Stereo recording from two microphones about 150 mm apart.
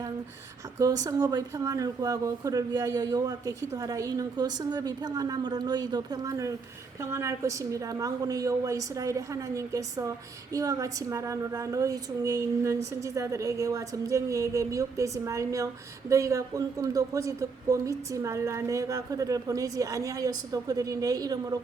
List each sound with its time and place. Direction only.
0.8 s a woman's voice: 25° right (ahead or behind)